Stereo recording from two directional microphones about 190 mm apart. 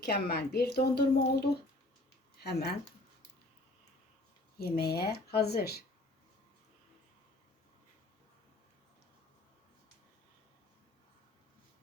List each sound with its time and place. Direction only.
0.0 s speech: 60° left (ahead or behind)
4.5 s speech: 55° left (ahead or behind)